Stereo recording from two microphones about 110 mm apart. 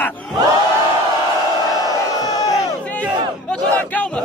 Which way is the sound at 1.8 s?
35° left (ahead or behind).